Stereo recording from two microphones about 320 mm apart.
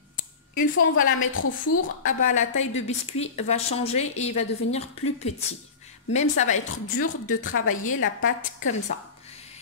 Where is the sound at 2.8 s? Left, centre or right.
Centre.